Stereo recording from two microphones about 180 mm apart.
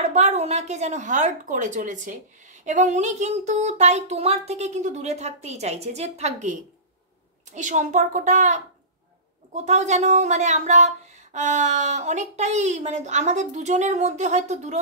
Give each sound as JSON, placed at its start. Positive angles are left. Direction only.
{"t": 0.1, "sound": "a woman's voice", "side_deg": -40}